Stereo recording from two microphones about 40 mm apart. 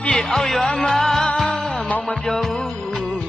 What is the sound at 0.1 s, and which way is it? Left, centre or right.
Speech, centre.